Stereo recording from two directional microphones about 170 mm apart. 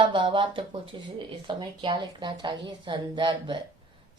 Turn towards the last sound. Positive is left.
turn(degrees=-30)  # may be behind; listen again after turning